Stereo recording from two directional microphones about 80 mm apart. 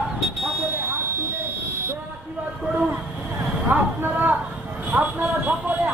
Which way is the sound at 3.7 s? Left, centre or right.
Right.